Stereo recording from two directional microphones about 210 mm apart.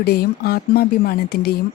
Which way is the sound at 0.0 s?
50° left (ahead or behind).